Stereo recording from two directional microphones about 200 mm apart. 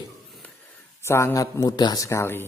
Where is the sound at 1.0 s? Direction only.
15° left (ahead or behind).